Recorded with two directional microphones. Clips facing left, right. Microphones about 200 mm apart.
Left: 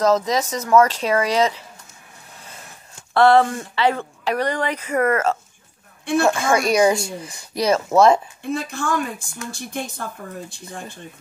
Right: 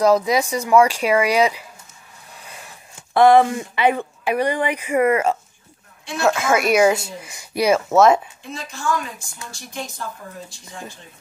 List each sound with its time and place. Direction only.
0.0 s speech: 10° right (ahead or behind)
3.2 s speech: 15° right (ahead or behind)
8.5 s a woman's voice: 55° left (ahead or behind)